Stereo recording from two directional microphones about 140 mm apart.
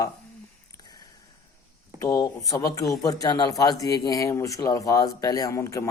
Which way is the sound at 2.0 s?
25° left (ahead or behind).